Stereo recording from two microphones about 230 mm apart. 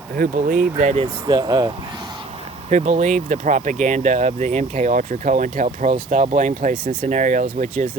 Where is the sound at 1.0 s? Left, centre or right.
Centre.